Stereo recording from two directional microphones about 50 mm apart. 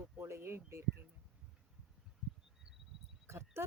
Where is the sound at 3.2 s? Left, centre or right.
Right.